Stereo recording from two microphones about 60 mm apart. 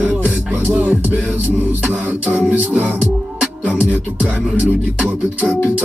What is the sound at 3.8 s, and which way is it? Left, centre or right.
Music, right.